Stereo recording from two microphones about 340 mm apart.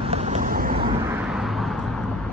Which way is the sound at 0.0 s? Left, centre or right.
Centre.